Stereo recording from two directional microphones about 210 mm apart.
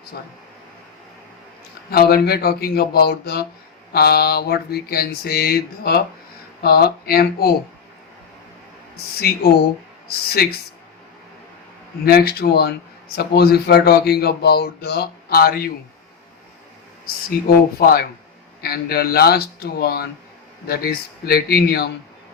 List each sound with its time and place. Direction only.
1.9 s speech: 45° left (ahead or behind)
10.1 s speech: 50° left (ahead or behind)
12.0 s speech: 50° left (ahead or behind)
17.7 s speech: 45° left (ahead or behind)